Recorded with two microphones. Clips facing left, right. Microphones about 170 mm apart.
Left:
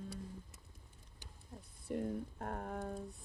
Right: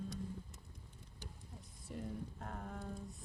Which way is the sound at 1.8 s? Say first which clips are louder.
Left 6 dB; 60° left (ahead or behind).